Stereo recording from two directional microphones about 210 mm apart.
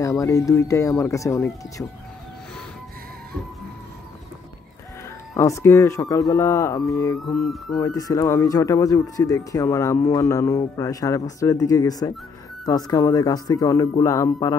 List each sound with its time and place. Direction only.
0.0 s speech: 15° left (ahead or behind)
5.3 s speech: 15° left (ahead or behind)
7.2 s music: centre (ahead or behind)
7.8 s speech: 15° left (ahead or behind)